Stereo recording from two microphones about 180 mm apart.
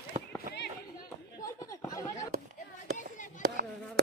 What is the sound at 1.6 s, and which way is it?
Snicker, 15° left (ahead or behind).